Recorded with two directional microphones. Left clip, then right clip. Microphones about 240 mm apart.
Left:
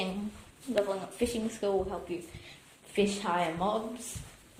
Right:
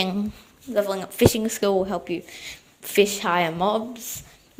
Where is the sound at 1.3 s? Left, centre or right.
Right.